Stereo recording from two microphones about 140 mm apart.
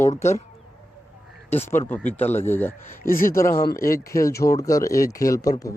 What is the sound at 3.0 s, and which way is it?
Speech, 90° left.